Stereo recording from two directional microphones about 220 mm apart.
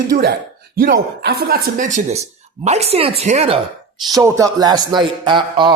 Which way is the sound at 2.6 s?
30° right (ahead or behind).